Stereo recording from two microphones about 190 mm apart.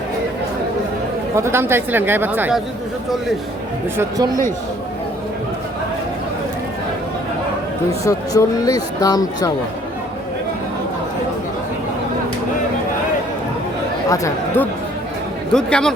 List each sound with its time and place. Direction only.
1.4 s speech: 15° right (ahead or behind)
7.9 s speech: 15° left (ahead or behind)
14.1 s speech: 15° left (ahead or behind)
15.5 s a man's voice: 5° left (ahead or behind)